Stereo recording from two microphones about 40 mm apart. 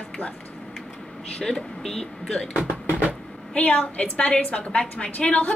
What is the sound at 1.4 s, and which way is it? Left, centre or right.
Speech, left.